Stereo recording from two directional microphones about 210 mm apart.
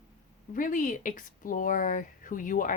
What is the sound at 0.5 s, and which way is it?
Speech, 40° left (ahead or behind).